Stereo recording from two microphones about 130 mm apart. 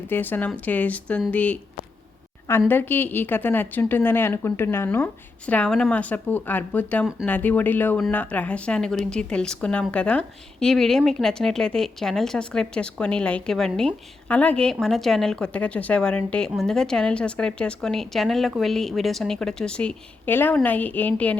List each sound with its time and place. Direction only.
0.1 s a woman's voice: 15° left (ahead or behind)